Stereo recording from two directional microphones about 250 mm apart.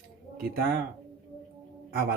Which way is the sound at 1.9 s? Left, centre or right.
Right.